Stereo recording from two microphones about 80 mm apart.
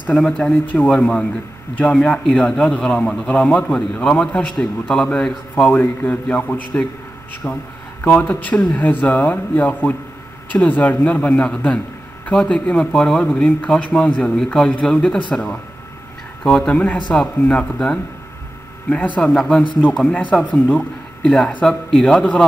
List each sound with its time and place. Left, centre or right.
0.1 s a man's voice: centre
4.6 s a man's voice: centre
19.1 s a man's voice: centre
21.6 s speech: centre